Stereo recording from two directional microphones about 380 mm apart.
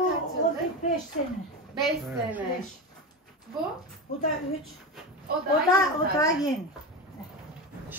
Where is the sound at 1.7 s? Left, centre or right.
Centre.